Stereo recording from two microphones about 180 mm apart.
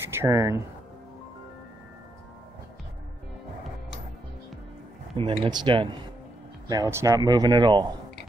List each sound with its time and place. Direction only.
0.1 s speech: 15° right (ahead or behind)
5.1 s a man's voice: 25° right (ahead or behind)